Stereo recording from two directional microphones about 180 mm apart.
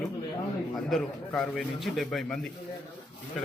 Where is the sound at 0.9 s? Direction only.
Centre (ahead or behind).